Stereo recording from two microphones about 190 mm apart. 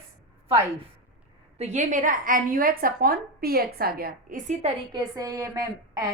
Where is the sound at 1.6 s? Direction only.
40° right (ahead or behind).